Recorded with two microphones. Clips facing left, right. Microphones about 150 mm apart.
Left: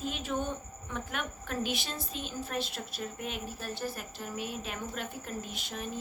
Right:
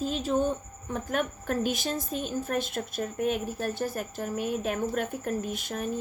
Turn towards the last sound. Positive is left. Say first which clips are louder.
# right 7 dB
turn(degrees=-50)  # may be behind; listen again after turning